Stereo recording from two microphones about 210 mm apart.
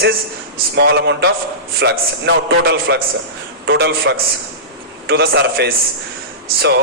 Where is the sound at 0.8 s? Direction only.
55° right (ahead or behind).